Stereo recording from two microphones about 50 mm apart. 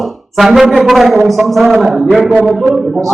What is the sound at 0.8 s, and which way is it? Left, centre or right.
A man's voice, centre.